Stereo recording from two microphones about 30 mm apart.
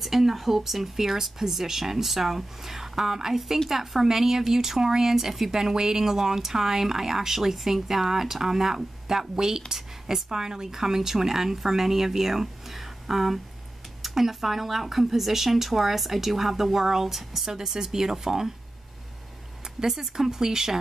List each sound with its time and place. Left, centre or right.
0.0 s speech: centre
19.8 s speech: centre